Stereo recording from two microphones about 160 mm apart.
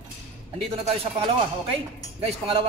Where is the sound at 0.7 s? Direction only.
40° right (ahead or behind).